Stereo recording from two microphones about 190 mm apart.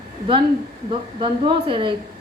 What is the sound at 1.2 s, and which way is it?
Speech, 25° right (ahead or behind).